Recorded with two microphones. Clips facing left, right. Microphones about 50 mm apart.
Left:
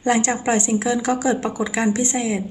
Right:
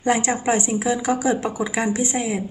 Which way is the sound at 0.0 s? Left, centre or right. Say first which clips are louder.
Left 1 dB; centre.